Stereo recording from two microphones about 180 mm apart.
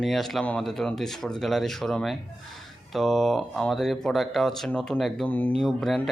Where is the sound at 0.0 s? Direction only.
Centre (ahead or behind).